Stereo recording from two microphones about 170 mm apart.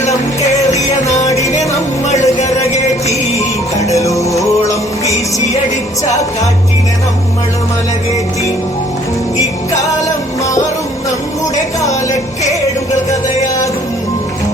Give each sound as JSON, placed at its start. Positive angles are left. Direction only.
{"t": 1.2, "sound": "music", "side_deg": 20}
{"t": 2.0, "sound": "music", "side_deg": 40}
{"t": 3.1, "sound": "music", "side_deg": 20}
{"t": 13.1, "sound": "music", "side_deg": 20}